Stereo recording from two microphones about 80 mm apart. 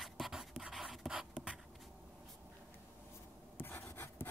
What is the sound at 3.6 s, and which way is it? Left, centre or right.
Writing, left.